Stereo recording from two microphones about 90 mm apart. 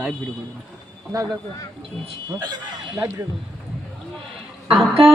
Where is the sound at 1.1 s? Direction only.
40° right (ahead or behind).